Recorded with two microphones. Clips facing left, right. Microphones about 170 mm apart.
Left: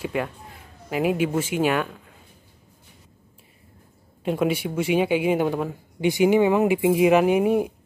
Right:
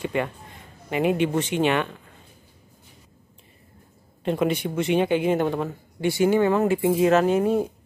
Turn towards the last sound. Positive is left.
turn(degrees=10)  # may be behind; listen again after turning